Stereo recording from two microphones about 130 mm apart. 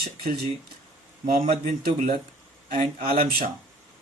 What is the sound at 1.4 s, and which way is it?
Speech, 90° right.